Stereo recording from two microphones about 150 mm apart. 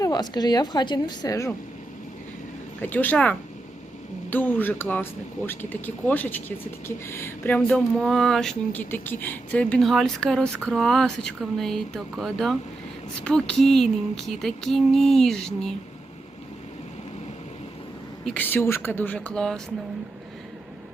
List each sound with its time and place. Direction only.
0.0 s a woman's voice: 25° left (ahead or behind)
2.8 s speech: 10° left (ahead or behind)
7.9 s speech: centre (ahead or behind)
18.3 s speech: 10° left (ahead or behind)